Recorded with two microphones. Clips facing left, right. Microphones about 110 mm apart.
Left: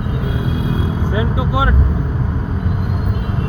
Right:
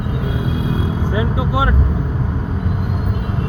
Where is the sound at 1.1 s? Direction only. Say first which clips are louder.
Even; 15° left (ahead or behind).